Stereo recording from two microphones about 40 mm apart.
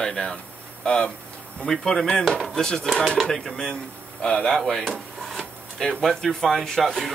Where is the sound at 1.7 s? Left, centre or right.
Centre.